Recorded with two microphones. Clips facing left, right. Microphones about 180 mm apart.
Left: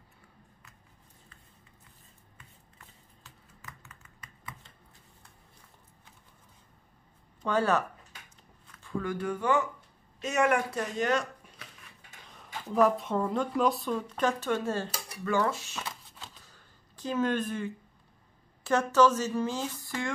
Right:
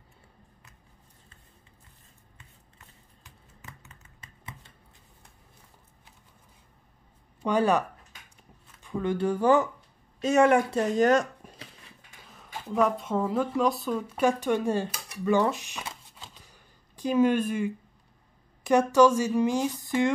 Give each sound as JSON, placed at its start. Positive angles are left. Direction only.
{"t": 3.3, "sound": "a sound", "side_deg": -20}
{"t": 7.4, "sound": "a woman's voice", "side_deg": -15}
{"t": 11.0, "sound": "speech", "side_deg": -45}
{"t": 12.3, "sound": "a woman's voice", "side_deg": 0}
{"t": 16.3, "sound": "a sound", "side_deg": -15}
{"t": 18.6, "sound": "a woman's voice", "side_deg": -15}